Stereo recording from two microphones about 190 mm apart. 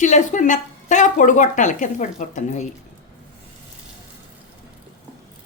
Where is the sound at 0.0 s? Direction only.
40° left (ahead or behind).